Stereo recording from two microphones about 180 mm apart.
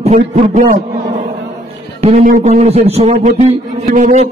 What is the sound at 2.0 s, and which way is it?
A man's voice, 45° right (ahead or behind).